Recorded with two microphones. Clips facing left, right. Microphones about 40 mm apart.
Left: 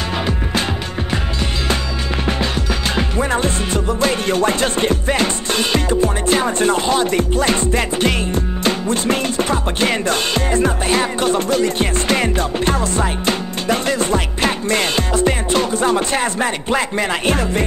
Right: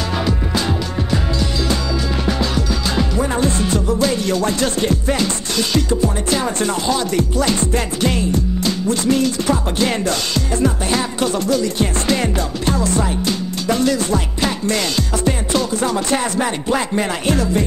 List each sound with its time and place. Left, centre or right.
0.2 s music: left
2.2 s music: left
17.3 s music: left